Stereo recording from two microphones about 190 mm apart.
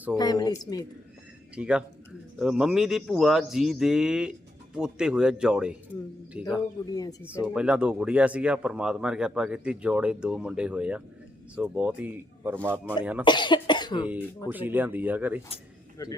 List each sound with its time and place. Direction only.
0.2 s cough: 20° left (ahead or behind)
1.5 s speech: 5° right (ahead or behind)
6.9 s cough: 20° left (ahead or behind)
7.2 s speech: 5° right (ahead or behind)
13.2 s cough: 25° left (ahead or behind)
14.0 s speech: 10° right (ahead or behind)
16.0 s a man's voice: 15° left (ahead or behind)